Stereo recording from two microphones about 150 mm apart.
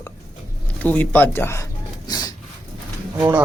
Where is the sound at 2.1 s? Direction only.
25° left (ahead or behind).